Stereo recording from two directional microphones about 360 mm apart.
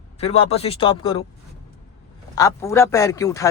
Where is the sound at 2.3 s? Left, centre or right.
Centre.